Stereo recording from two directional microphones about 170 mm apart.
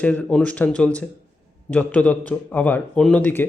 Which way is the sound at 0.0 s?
10° left (ahead or behind).